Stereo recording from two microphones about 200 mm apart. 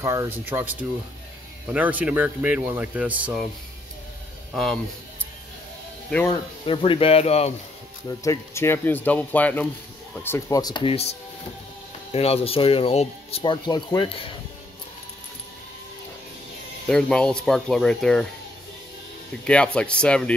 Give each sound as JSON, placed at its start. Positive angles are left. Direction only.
{"t": 0.0, "sound": "speech", "side_deg": -15}
{"t": 6.2, "sound": "speech", "side_deg": 25}
{"t": 8.1, "sound": "speech", "side_deg": 15}
{"t": 16.8, "sound": "speech", "side_deg": 5}
{"t": 19.4, "sound": "speech", "side_deg": 5}